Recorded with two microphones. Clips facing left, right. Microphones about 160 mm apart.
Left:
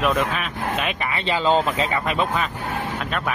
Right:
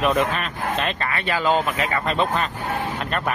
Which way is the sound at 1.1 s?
20° left (ahead or behind).